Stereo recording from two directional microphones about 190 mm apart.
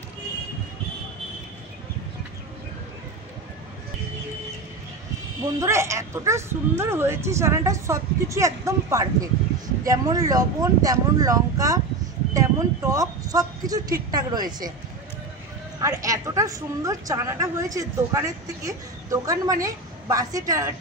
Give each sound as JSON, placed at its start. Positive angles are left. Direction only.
{"t": 5.6, "sound": "a woman's voice", "side_deg": -15}
{"t": 15.8, "sound": "a woman's voice", "side_deg": -15}